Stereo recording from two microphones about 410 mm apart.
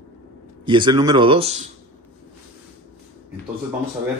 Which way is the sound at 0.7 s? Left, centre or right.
Centre.